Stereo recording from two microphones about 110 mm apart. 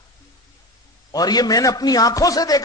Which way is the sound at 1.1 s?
35° left (ahead or behind).